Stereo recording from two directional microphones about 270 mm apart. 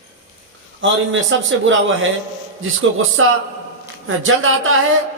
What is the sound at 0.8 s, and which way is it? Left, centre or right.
A man's voice, right.